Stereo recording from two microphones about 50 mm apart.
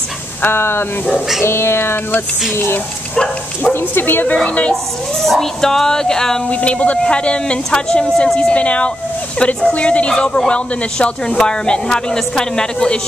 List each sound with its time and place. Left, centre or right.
0.4 s speech: left
2.5 s speech: left
4.5 s speech: left
5.2 s speech: centre
6.5 s speech: left